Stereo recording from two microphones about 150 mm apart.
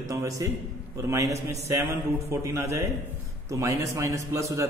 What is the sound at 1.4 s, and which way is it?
A man's voice, 20° right (ahead or behind).